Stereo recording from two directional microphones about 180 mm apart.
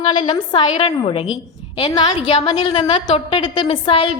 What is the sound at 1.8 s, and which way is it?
A woman's voice, 25° left (ahead or behind).